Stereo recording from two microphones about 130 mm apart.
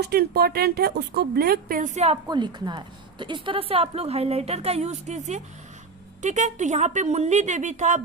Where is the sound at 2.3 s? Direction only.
35° right (ahead or behind).